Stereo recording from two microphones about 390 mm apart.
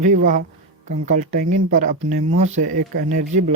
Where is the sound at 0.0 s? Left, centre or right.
Centre.